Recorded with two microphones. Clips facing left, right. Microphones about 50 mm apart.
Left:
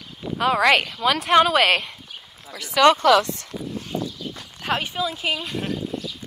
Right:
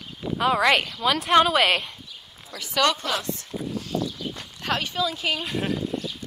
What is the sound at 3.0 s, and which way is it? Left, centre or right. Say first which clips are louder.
Speech: left 11 dB; left.